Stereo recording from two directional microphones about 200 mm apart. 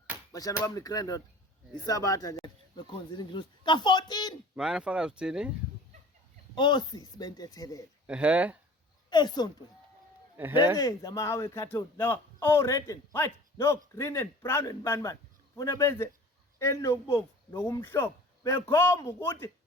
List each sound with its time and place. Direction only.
0.3 s speech: 15° left (ahead or behind)
4.5 s speech: 5° right (ahead or behind)
6.6 s speech: 20° left (ahead or behind)
8.0 s speech: 5° right (ahead or behind)
9.0 s speech: 20° left (ahead or behind)
10.3 s speech: 10° right (ahead or behind)
10.8 s speech: 15° left (ahead or behind)